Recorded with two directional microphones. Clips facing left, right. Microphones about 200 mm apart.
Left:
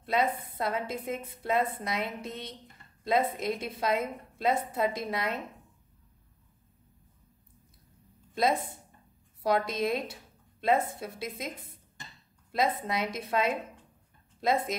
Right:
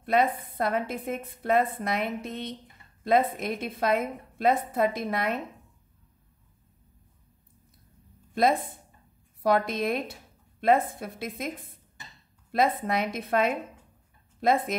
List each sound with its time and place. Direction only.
0.0 s a woman's voice: 55° right (ahead or behind)
9.5 s a woman's voice: 55° right (ahead or behind)